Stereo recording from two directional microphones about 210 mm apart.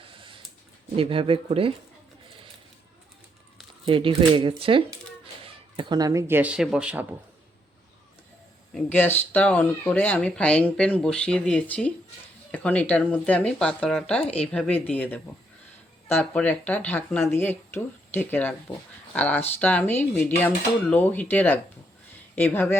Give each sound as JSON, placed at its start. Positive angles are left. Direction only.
{"t": 0.0, "sound": "a sound", "side_deg": -25}
{"t": 0.9, "sound": "speech", "side_deg": -25}
{"t": 3.8, "sound": "speech", "side_deg": -25}
{"t": 8.7, "sound": "speech", "side_deg": 10}